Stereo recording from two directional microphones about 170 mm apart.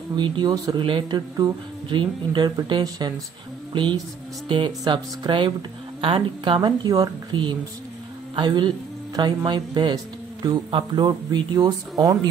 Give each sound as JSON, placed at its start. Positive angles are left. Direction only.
{"t": 0.1, "sound": "speech", "side_deg": -25}